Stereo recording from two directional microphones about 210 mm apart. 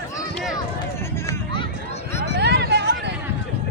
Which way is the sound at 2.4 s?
55° right (ahead or behind).